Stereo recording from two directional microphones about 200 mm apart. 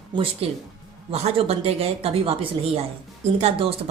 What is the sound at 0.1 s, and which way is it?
A woman's voice, 25° right (ahead or behind).